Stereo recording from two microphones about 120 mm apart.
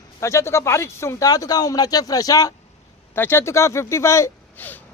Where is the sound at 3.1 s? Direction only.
20° left (ahead or behind).